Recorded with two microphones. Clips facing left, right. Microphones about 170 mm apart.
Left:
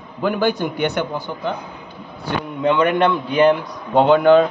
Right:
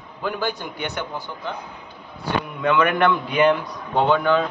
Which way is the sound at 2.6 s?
25° left (ahead or behind).